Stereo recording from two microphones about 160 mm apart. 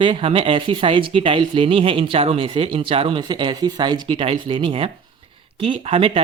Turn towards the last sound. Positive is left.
turn(degrees=-35)  # may be behind; listen again after turning